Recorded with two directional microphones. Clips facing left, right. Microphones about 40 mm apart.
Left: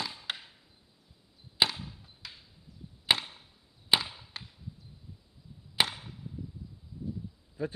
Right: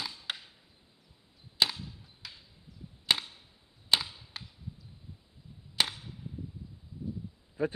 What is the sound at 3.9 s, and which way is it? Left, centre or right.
Chop, centre.